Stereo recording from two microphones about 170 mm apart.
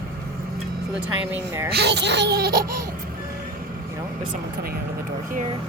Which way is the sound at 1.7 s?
85° right.